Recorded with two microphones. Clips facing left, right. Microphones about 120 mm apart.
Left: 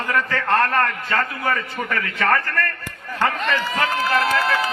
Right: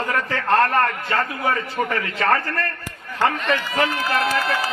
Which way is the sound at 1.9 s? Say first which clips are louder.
Left 2 dB; 25° right (ahead or behind).